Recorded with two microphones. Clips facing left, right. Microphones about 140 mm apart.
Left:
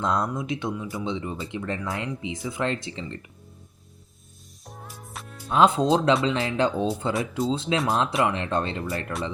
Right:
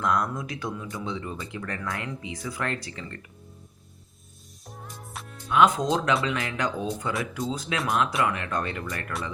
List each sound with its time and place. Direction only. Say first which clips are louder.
0.0 s speech: left 1 dB; 25° left (ahead or behind)
4.6 s music: even; centre (ahead or behind)
5.5 s speech: left 2 dB; 30° left (ahead or behind)